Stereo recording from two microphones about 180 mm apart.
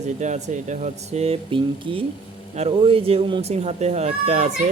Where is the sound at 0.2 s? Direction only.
40° right (ahead or behind).